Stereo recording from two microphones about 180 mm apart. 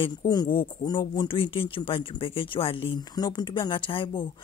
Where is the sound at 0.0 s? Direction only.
25° left (ahead or behind).